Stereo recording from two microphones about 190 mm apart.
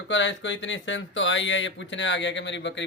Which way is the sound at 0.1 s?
70° left (ahead or behind).